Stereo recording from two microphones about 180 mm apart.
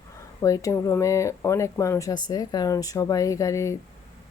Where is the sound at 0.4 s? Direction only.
20° left (ahead or behind).